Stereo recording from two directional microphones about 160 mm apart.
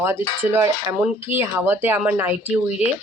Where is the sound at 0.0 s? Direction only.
15° right (ahead or behind).